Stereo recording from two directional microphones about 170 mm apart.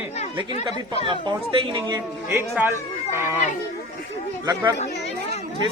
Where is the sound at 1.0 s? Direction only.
30° right (ahead or behind).